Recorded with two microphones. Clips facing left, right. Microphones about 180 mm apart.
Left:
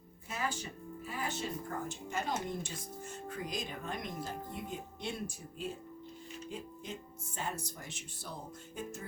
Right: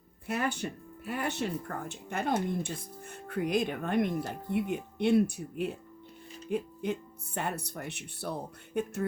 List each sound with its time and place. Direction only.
0.3 s speech: 65° right (ahead or behind)